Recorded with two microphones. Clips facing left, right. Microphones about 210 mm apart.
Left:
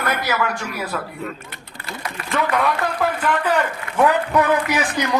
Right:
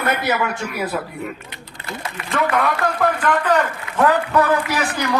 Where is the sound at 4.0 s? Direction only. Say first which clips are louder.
Even; 15° left (ahead or behind).